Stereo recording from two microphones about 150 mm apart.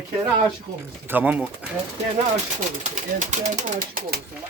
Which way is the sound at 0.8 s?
10° right (ahead or behind).